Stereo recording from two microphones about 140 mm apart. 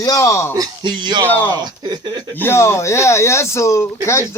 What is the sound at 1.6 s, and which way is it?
Speech, 30° right (ahead or behind).